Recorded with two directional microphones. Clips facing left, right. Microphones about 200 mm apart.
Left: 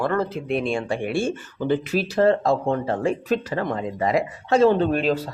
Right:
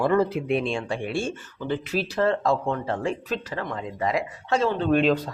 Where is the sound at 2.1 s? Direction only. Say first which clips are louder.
Left 4 dB; 35° left (ahead or behind).